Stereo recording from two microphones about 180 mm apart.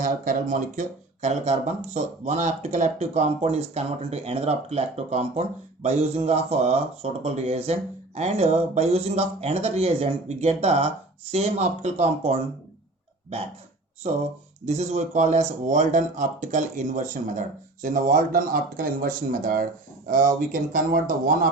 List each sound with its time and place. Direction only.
0.0 s speech: 45° right (ahead or behind)
14.0 s speech: 35° right (ahead or behind)